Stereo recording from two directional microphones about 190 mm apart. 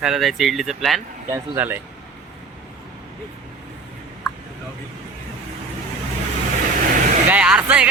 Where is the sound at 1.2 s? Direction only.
15° right (ahead or behind).